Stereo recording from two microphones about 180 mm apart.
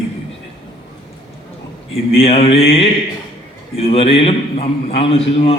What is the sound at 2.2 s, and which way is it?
A man's voice, 35° left (ahead or behind).